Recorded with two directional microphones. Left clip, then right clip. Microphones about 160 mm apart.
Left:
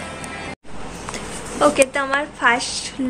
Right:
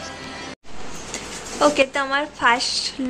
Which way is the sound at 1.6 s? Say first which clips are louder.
Left 2 dB; 20° right (ahead or behind).